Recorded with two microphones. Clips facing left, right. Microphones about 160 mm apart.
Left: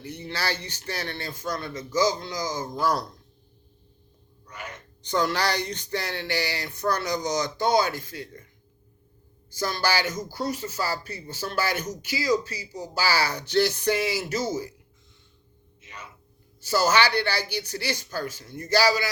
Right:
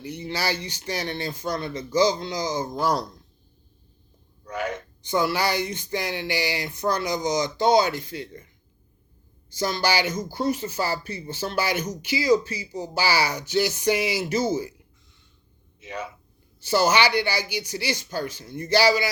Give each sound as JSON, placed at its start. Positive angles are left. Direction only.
{"t": 0.0, "sound": "speech", "side_deg": -15}
{"t": 4.4, "sound": "wail", "side_deg": -90}
{"t": 5.0, "sound": "speech", "side_deg": -10}
{"t": 9.6, "sound": "speech", "side_deg": -20}
{"t": 15.8, "sound": "a sound", "side_deg": -90}
{"t": 16.6, "sound": "speech", "side_deg": -15}